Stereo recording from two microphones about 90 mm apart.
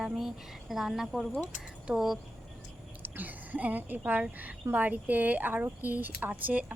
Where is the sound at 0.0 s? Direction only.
5° right (ahead or behind).